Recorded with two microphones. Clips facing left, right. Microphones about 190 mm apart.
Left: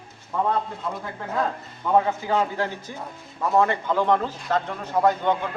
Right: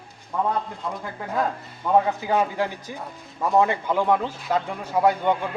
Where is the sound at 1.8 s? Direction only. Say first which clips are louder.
Right 1 dB; 10° right (ahead or behind).